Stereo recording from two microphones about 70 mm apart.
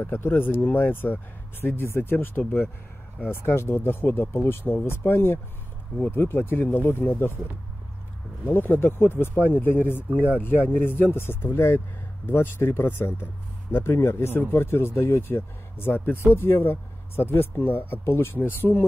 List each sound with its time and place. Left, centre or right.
0.0 s speech: left
8.5 s speech: left